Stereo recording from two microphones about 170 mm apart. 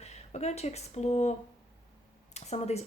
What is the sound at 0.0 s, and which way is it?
Speech, 40° left (ahead or behind).